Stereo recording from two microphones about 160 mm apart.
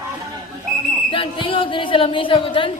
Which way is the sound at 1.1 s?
30° left (ahead or behind).